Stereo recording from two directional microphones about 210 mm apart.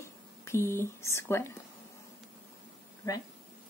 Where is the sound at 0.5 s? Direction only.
10° left (ahead or behind).